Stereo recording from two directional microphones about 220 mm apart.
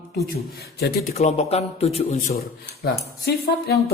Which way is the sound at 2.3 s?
45° left (ahead or behind).